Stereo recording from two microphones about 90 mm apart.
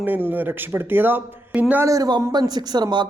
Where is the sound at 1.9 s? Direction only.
45° right (ahead or behind).